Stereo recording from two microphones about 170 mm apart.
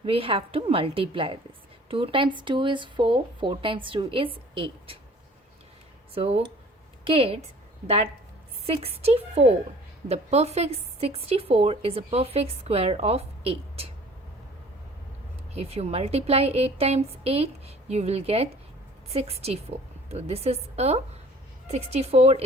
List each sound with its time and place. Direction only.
0.0 s a woman's voice: 35° right (ahead or behind)
6.1 s a woman's voice: 35° right (ahead or behind)
8.6 s a woman's voice: 35° right (ahead or behind)
15.5 s a woman's voice: 35° right (ahead or behind)